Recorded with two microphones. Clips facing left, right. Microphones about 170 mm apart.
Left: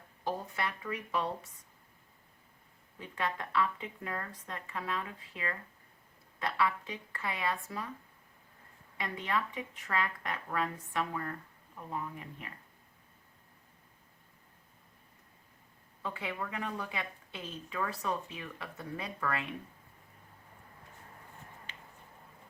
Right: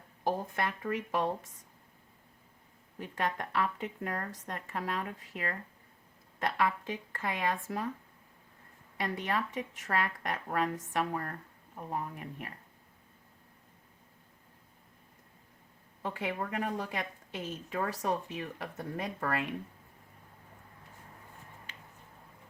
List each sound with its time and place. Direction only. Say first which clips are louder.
0.3 s speech: right 3 dB; 50° right (ahead or behind)
3.0 s speech: right 2 dB; 45° right (ahead or behind)
9.0 s a woman's voice: right 2 dB; 40° right (ahead or behind)
16.0 s speech: right 3 dB; 45° right (ahead or behind)